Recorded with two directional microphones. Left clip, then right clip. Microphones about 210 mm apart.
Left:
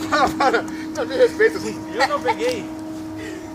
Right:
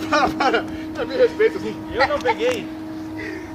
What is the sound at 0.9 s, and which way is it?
Speech, 25° right (ahead or behind).